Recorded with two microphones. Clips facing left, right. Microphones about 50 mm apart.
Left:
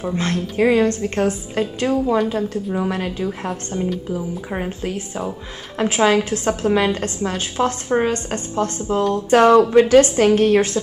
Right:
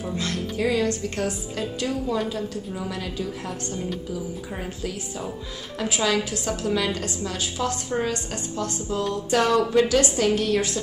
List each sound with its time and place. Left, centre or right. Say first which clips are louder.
0.0 s a woman's voice: left 6 dB; left